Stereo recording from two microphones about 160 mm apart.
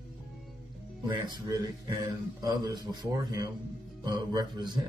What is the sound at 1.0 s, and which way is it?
Speech, 30° right (ahead or behind).